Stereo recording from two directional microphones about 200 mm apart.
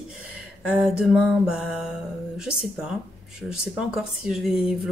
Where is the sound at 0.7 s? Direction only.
Centre (ahead or behind).